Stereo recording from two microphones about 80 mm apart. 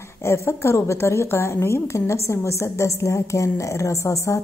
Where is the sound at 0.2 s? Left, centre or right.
Left.